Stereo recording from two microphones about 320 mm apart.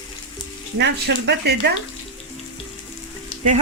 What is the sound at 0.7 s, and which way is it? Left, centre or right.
Speech, right.